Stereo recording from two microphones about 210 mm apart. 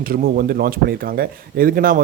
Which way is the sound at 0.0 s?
45° right (ahead or behind).